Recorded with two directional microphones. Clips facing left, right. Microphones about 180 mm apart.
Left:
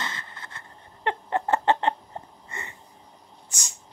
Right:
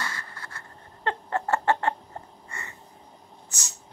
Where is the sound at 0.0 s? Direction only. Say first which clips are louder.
Even; 20° left (ahead or behind).